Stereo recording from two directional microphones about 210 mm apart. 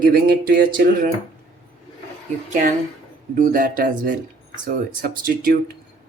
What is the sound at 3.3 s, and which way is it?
Speech, 40° right (ahead or behind).